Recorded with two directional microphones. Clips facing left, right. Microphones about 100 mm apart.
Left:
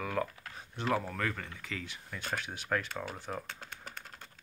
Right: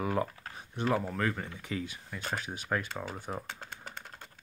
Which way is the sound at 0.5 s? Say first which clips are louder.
Right 2 dB; 10° right (ahead or behind).